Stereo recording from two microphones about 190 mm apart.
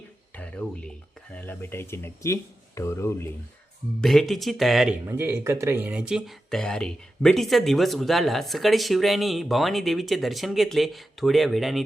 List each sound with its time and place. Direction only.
0.3 s a sound: 5° left (ahead or behind)
1.3 s speech: 10° left (ahead or behind)
4.0 s speech: centre (ahead or behind)
5.0 s speech: 10° right (ahead or behind)